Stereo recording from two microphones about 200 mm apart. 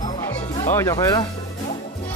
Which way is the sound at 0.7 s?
15° left (ahead or behind).